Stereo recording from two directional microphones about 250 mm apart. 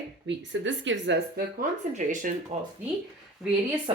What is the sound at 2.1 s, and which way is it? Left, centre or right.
Speech, right.